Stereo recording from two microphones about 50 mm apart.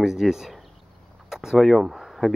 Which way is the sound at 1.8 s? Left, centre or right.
Centre.